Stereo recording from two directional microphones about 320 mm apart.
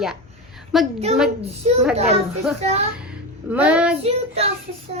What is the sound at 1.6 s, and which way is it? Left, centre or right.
Child singing, centre.